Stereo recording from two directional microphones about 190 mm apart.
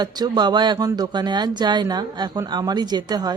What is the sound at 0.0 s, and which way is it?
Speech, 20° right (ahead or behind).